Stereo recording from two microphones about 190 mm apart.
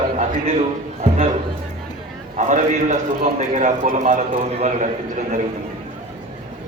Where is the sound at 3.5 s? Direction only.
40° right (ahead or behind).